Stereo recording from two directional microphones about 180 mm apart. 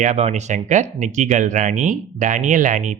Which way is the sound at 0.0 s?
35° right (ahead or behind).